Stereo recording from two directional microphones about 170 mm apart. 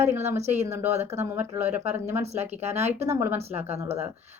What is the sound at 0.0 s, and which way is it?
Speech, 15° right (ahead or behind).